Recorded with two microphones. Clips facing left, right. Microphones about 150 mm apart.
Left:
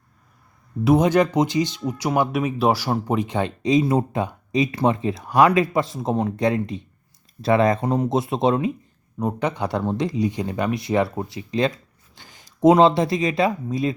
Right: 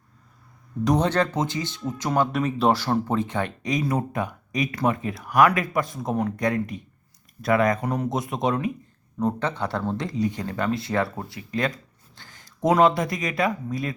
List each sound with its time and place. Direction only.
0.9 s speech: 10° left (ahead or behind)
9.1 s speech: 10° left (ahead or behind)